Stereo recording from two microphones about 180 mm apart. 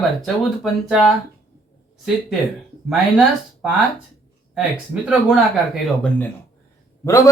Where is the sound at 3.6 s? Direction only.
5° right (ahead or behind).